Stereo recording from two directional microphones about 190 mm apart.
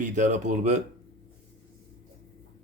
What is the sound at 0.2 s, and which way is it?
Speech, 40° right (ahead or behind).